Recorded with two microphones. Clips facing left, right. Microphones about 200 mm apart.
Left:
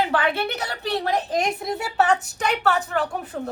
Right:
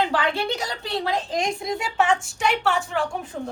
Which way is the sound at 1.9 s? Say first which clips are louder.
Left 2 dB; 40° left (ahead or behind).